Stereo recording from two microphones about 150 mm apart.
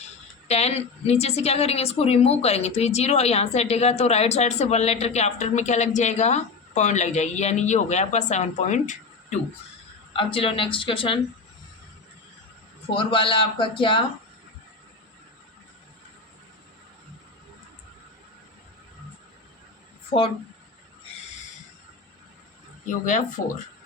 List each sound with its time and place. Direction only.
0.4 s a woman's voice: 45° left (ahead or behind)
10.1 s speech: 35° left (ahead or behind)
12.9 s speech: 35° left (ahead or behind)
23.4 s speech: 60° left (ahead or behind)